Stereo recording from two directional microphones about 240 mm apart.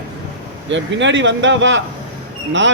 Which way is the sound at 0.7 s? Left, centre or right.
Right.